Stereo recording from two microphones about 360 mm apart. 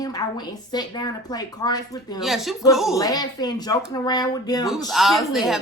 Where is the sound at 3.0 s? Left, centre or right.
Centre.